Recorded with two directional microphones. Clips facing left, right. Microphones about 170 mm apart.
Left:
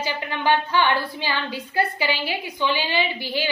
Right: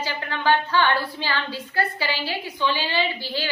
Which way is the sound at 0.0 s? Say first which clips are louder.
Left 1 dB; 15° left (ahead or behind).